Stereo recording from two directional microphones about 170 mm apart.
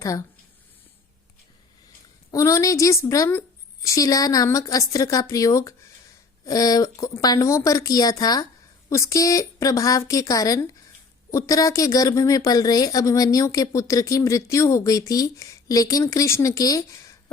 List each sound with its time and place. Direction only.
0.0 s a woman's voice: 20° left (ahead or behind)
2.3 s a woman's voice: 20° left (ahead or behind)